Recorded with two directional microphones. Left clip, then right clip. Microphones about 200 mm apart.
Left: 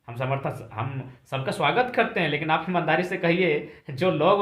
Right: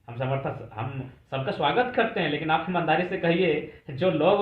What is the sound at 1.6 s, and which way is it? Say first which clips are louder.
Speech: left 1 dB; 45° left (ahead or behind).